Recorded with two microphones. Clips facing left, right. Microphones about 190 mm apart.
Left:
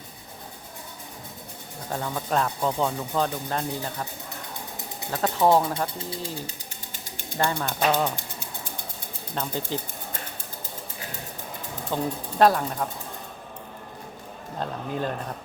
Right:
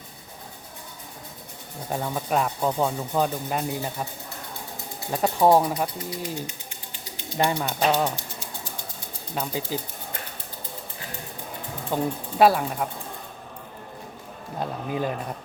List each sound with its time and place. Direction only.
1.9 s speech: 15° right (ahead or behind)
5.1 s speech: 20° right (ahead or behind)
6.0 s speech: 30° left (ahead or behind)
6.9 s mechanisms: 50° left (ahead or behind)
7.3 s speech: 15° right (ahead or behind)
9.3 s speech: 5° right (ahead or behind)
11.9 s speech: 10° right (ahead or behind)
14.6 s a sound: 10° right (ahead or behind)